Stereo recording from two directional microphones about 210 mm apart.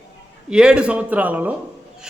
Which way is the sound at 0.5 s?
5° right (ahead or behind).